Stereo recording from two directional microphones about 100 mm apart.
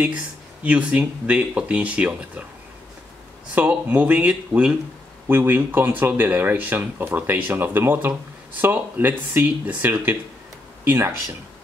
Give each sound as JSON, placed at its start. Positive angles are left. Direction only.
{"t": 0.7, "sound": "speech", "side_deg": -15}
{"t": 3.5, "sound": "speech", "side_deg": -15}
{"t": 5.3, "sound": "speech", "side_deg": -20}